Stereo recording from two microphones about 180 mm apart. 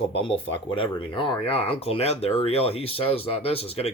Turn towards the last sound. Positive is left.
turn(degrees=35)  # may be behind; listen again after turning